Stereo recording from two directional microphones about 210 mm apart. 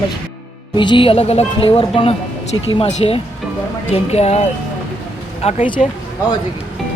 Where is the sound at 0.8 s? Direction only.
25° left (ahead or behind).